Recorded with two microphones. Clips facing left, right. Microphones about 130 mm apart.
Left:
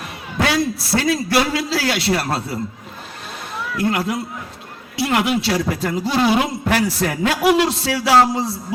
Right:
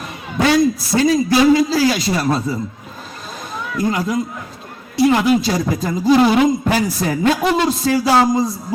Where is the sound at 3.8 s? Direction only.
65° left (ahead or behind).